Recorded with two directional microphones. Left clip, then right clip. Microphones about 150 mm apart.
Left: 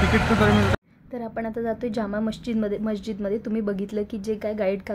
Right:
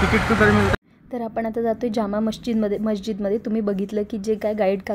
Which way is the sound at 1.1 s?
25° right (ahead or behind).